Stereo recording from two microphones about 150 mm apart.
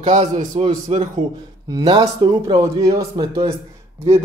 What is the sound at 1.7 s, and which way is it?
A man's voice, 25° right (ahead or behind).